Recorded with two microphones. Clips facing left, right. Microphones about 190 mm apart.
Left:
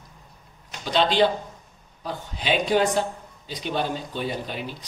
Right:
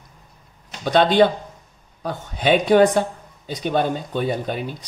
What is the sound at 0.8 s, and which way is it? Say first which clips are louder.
Speech: right 5 dB; 55° right (ahead or behind).